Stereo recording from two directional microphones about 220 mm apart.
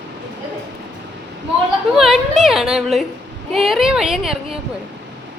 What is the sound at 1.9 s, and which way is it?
A woman's voice, centre (ahead or behind).